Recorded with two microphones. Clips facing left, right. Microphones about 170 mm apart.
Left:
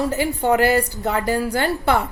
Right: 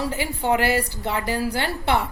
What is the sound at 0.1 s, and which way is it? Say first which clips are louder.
A woman's voice: left 4 dB; 45° left (ahead or behind).